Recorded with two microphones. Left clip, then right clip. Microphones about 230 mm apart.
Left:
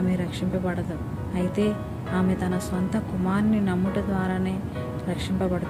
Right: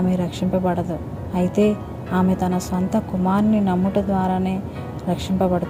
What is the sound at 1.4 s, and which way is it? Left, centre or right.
A woman's voice, centre.